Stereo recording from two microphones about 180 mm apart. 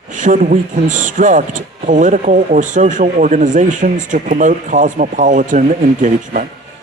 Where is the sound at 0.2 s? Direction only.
45° right (ahead or behind).